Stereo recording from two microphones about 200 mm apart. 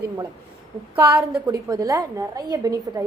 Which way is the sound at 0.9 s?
10° right (ahead or behind).